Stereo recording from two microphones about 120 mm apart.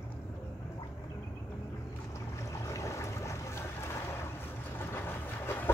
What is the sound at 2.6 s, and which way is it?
Boat, 25° left (ahead or behind).